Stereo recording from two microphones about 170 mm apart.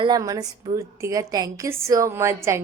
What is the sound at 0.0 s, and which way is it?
A woman's voice, 25° right (ahead or behind).